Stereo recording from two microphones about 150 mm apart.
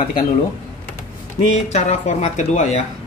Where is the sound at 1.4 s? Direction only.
45° left (ahead or behind).